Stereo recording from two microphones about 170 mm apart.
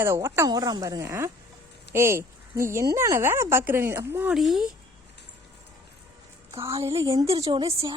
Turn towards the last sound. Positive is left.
turn(degrees=-20)  # may be behind; listen again after turning